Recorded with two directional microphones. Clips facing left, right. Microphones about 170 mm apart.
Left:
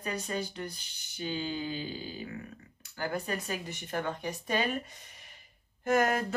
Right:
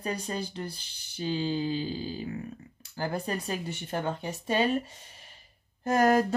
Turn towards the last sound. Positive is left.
turn(degrees=-35)  # may be behind; listen again after turning